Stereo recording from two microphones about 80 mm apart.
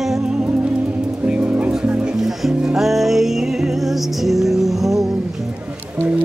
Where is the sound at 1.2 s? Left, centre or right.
Centre.